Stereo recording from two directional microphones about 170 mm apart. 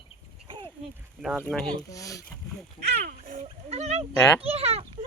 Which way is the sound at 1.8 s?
20° left (ahead or behind).